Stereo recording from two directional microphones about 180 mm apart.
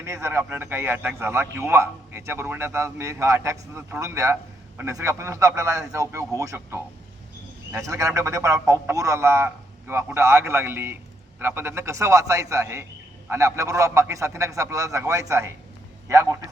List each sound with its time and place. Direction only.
0.0 s a man's voice: 15° right (ahead or behind)